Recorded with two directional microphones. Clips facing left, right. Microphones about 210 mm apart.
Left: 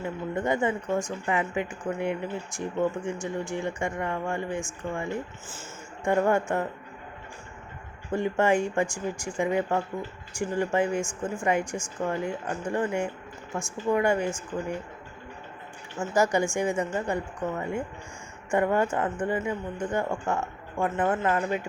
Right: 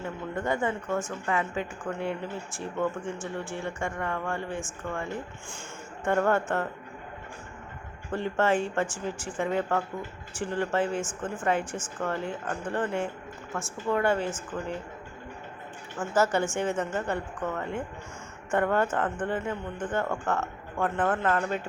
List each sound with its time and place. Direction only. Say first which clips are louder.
0.0 s speech: left 3 dB; 15° left (ahead or behind)
8.1 s speech: left 2 dB; 15° left (ahead or behind)
16.0 s speech: left 1 dB; 15° left (ahead or behind)